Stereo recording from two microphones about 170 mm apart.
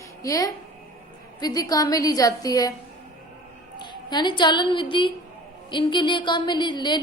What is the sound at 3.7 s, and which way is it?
A woman's voice, 25° left (ahead or behind).